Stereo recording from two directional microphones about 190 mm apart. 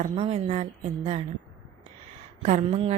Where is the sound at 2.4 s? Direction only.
35° right (ahead or behind).